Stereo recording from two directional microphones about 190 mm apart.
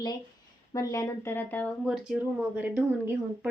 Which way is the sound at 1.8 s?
Centre (ahead or behind).